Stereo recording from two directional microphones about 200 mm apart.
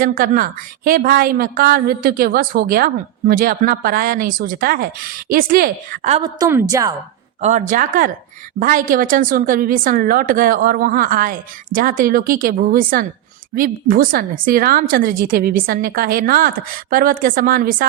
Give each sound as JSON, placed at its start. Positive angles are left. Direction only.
{"t": 0.2, "sound": "a woman's voice", "side_deg": -45}
{"t": 6.1, "sound": "a woman's voice", "side_deg": -25}
{"t": 7.4, "sound": "a woman's voice", "side_deg": -40}